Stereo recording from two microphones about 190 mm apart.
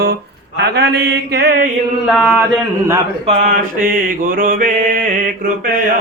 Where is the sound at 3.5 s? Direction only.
45° right (ahead or behind).